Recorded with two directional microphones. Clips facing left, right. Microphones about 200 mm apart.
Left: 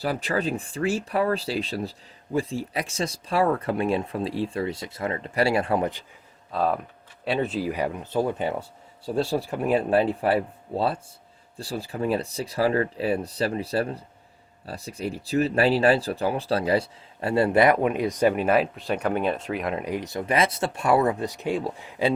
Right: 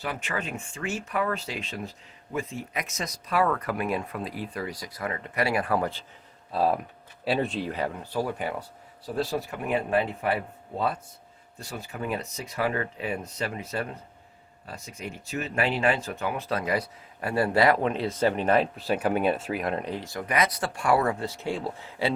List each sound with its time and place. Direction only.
0.0 s speech: 35° left (ahead or behind); by 6.1 s 20° left (ahead or behind)
6.5 s speech: 5° right (ahead or behind)
19.8 s speech: 15° left (ahead or behind)